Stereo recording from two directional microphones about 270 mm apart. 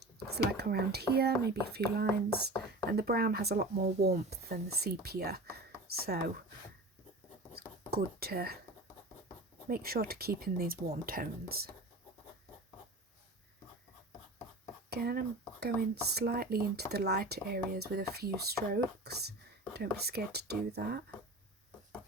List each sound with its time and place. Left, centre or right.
0.5 s speech: right
7.5 s whispering: right
9.6 s speech: right
14.8 s speech: right